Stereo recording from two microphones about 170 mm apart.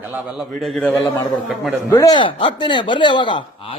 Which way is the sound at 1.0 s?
20° left (ahead or behind).